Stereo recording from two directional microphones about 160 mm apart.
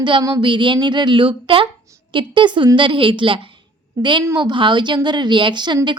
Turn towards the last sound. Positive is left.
turn(degrees=-30)  # may be behind; listen again after turning